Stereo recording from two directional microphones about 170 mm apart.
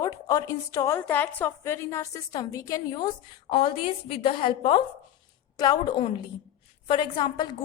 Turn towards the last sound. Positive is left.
turn(degrees=25)  # may be behind; listen again after turning